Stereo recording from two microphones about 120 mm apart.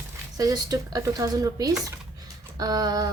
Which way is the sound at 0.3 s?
30° right (ahead or behind).